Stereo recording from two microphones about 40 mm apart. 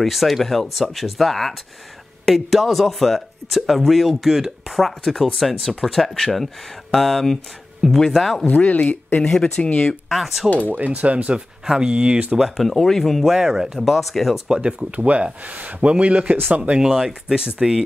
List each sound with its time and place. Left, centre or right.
0.0 s speech: centre
8.5 s speech: left
9.2 s speech: centre
10.0 s speech: centre
10.7 s speech: right
11.3 s speech: centre
11.9 s speech: right
12.4 s speech: centre
12.7 s speech: centre
13.3 s speech: centre
14.6 s speech: right
14.9 s speech: right
16.9 s speech: centre